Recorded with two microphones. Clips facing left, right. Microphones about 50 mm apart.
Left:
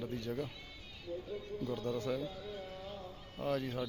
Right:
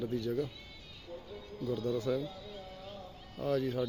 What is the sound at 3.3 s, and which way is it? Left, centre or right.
Speech, left.